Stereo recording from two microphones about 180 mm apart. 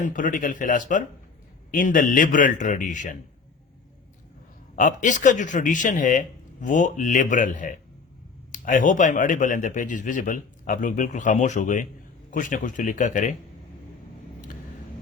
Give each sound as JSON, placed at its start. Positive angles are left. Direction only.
{"t": 0.0, "sound": "speech", "side_deg": 45}
{"t": 4.7, "sound": "speech", "side_deg": 45}